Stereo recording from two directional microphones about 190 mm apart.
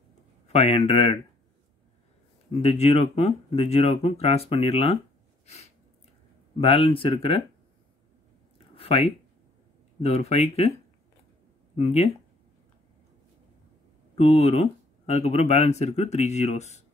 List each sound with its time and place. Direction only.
0.5 s speech: 35° left (ahead or behind)
2.5 s speech: 35° left (ahead or behind)
6.6 s speech: 30° left (ahead or behind)
8.5 s a sound: 30° left (ahead or behind)
10.0 s speech: 35° left (ahead or behind)
11.7 s speech: 35° left (ahead or behind)
14.1 s speech: 35° left (ahead or behind)